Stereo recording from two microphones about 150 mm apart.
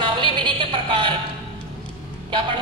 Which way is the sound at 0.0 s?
35° right (ahead or behind).